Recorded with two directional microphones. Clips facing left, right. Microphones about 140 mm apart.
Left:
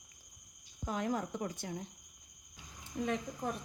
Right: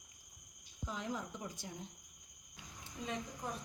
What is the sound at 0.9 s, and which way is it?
Speech, 55° left (ahead or behind).